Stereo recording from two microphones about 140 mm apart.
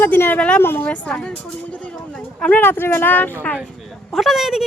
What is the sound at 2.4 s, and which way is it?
Speech, 10° left (ahead or behind).